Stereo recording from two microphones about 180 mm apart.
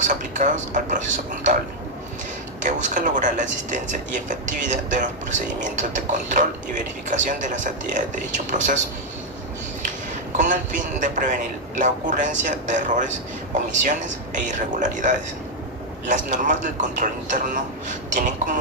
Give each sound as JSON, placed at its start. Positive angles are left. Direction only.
{"t": 0.1, "sound": "speech", "side_deg": -45}
{"t": 2.6, "sound": "speech", "side_deg": -45}
{"t": 10.3, "sound": "speech", "side_deg": -45}